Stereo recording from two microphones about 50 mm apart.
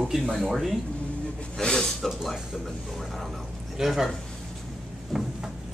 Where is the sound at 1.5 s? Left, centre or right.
Centre.